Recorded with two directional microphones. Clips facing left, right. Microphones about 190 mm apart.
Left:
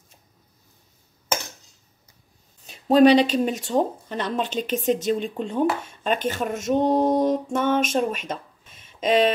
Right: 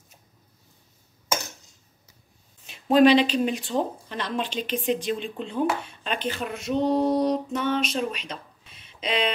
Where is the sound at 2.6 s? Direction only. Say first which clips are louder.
Left 2 dB; 40° left (ahead or behind).